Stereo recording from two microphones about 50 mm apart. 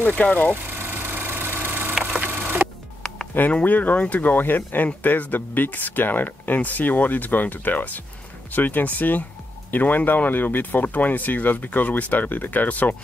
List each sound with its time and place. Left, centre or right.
0.0 s speech: left
0.7 s a sound: right
2.0 s wood: right
3.6 s speech: left